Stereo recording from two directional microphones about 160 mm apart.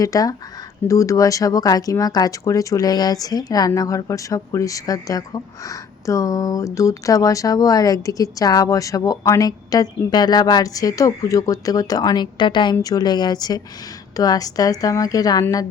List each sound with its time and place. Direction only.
0.0 s speech: 20° left (ahead or behind)